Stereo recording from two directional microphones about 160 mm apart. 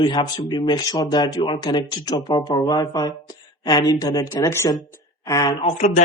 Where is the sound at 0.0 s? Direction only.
30° left (ahead or behind).